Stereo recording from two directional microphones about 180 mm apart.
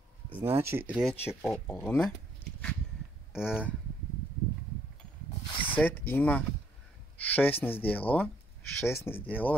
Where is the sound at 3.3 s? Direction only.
5° right (ahead or behind).